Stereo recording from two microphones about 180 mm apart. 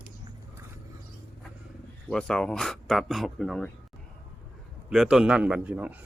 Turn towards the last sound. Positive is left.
turn(degrees=-10)  # may be behind; listen again after turning